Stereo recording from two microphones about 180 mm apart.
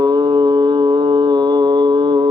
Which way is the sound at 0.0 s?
20° right (ahead or behind).